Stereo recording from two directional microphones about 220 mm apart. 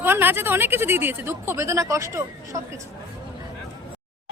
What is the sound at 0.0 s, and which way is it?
Speech, 10° right (ahead or behind).